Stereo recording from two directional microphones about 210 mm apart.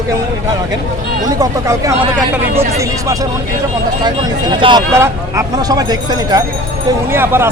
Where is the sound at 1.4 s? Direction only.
15° right (ahead or behind).